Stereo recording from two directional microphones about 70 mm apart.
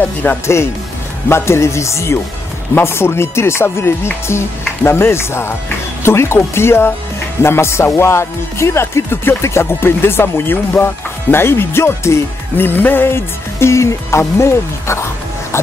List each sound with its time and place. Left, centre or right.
0.0 s speech: left
1.3 s speech: left
15.5 s music: left